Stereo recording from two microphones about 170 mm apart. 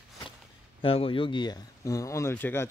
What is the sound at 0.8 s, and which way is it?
Speech, 35° left (ahead or behind).